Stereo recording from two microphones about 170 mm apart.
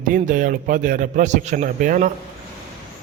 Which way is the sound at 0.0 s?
50° right (ahead or behind).